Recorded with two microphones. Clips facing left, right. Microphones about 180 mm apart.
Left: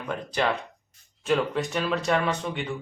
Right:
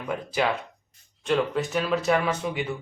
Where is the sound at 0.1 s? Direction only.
5° right (ahead or behind).